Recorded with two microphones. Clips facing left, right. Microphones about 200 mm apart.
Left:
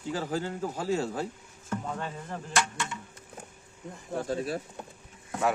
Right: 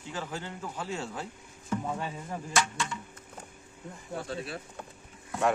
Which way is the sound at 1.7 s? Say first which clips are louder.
Right 1 dB; 10° right (ahead or behind).